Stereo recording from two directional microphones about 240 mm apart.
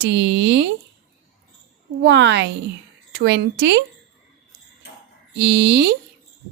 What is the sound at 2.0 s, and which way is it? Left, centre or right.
Speech, right.